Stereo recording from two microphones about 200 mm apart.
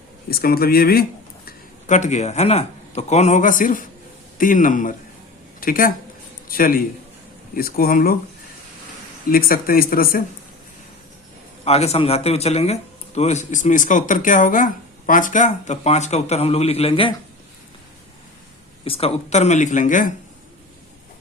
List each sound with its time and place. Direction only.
0.3 s speech: 50° left (ahead or behind)
1.5 s a man's voice: 35° left (ahead or behind)
9.3 s speech: 45° left (ahead or behind)
11.6 s a man's voice: 30° left (ahead or behind)
18.9 s a man's voice: 30° left (ahead or behind)